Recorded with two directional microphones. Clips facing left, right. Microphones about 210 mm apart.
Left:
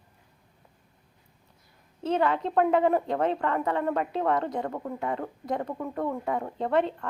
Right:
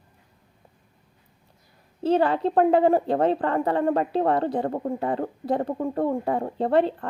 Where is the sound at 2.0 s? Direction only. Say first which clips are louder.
Right 5 dB; 35° right (ahead or behind).